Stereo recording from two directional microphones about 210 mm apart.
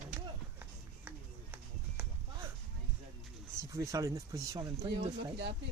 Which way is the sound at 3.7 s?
15° right (ahead or behind).